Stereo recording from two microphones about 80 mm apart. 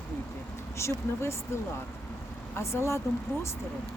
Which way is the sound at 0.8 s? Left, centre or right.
Left.